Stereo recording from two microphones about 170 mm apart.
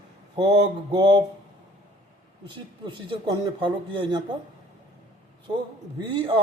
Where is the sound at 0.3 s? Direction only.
25° right (ahead or behind).